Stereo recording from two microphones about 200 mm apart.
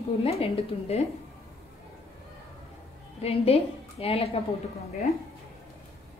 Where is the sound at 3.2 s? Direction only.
30° left (ahead or behind).